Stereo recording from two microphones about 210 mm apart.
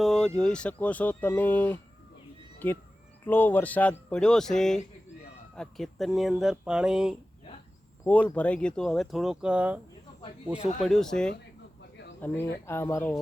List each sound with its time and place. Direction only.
0.0 s speech: 5° left (ahead or behind)
11.8 s a sound: 55° left (ahead or behind)
12.6 s speech: 10° left (ahead or behind)